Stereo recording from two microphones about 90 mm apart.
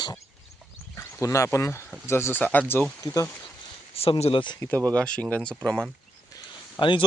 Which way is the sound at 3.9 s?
90° left.